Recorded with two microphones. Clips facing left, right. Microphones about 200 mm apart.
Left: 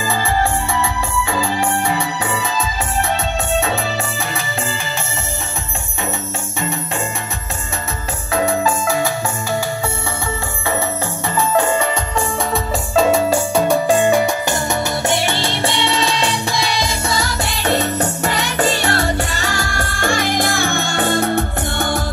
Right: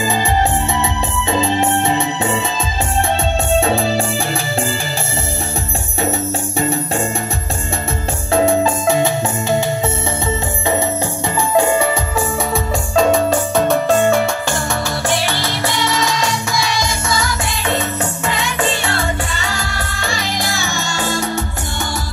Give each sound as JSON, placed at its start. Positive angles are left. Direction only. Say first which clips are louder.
{"t": 1.3, "sound": "music", "louder": "right 5 dB", "side_deg": -25}
{"t": 3.5, "sound": "music", "louder": "right 5 dB", "side_deg": -30}
{"t": 8.3, "sound": "music", "louder": "right 3 dB", "side_deg": -30}
{"t": 11.5, "sound": "music", "louder": "right 4 dB", "side_deg": -10}
{"t": 12.9, "sound": "music", "louder": "right 1 dB", "side_deg": 5}